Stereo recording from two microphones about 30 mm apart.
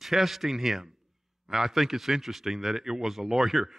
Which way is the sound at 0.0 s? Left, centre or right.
Centre.